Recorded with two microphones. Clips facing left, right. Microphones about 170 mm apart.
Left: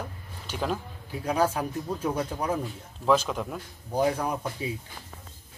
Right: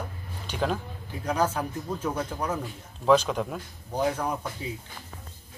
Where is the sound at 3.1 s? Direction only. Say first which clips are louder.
Right 2 dB; centre (ahead or behind).